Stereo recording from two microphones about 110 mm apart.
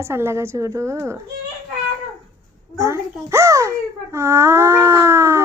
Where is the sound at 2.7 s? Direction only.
25° right (ahead or behind).